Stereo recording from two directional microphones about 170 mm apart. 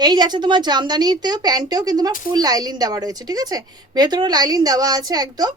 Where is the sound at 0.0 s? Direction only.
25° right (ahead or behind).